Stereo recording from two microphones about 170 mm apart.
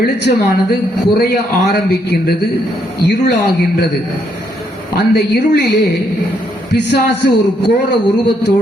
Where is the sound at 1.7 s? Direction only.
70° left (ahead or behind).